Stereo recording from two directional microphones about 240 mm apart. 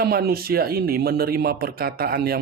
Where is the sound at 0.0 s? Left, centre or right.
Right.